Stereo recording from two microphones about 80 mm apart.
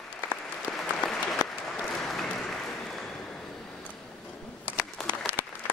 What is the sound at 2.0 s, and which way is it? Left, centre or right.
Applause, centre.